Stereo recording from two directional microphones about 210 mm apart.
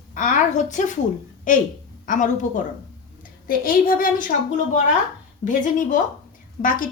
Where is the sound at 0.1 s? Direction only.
35° left (ahead or behind).